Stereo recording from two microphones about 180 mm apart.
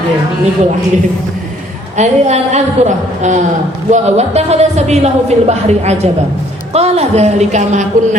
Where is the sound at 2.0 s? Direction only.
40° right (ahead or behind).